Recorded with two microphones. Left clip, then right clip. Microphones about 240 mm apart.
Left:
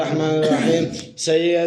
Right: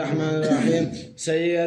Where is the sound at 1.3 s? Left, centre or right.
Left.